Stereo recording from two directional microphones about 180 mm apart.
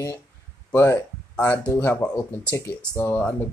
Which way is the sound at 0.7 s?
10° left (ahead or behind).